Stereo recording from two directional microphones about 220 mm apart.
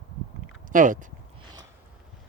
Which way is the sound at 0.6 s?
35° right (ahead or behind).